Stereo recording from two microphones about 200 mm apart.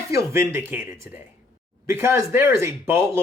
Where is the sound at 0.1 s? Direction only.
15° right (ahead or behind).